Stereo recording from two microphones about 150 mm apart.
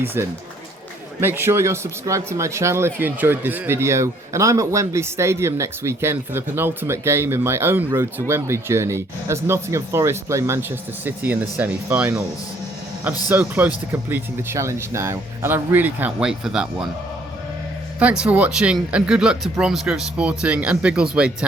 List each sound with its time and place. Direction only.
0.0 s speech: 15° right (ahead or behind)
13.2 s speech: 10° right (ahead or behind)
18.0 s speech: 5° right (ahead or behind)